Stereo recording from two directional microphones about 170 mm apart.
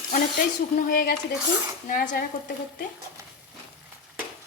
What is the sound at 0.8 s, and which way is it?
A woman's voice, 60° left (ahead or behind).